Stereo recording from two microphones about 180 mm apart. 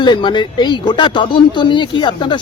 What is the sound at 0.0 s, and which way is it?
Speech, 25° left (ahead or behind).